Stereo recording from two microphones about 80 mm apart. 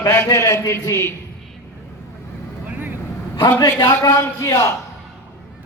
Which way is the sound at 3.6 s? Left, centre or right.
Left.